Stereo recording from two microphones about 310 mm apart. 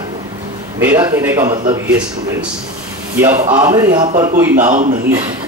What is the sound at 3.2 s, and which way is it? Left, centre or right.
Speech, centre.